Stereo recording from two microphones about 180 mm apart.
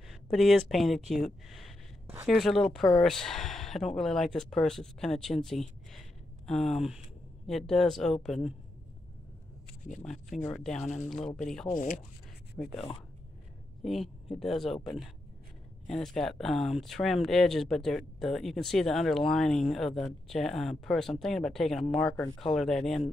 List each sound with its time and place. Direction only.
0.1 s speech: centre (ahead or behind)
10.0 s speech: centre (ahead or behind)
11.7 s speech: 45° left (ahead or behind)
12.6 s speech: 15° left (ahead or behind)
13.8 s speech: centre (ahead or behind)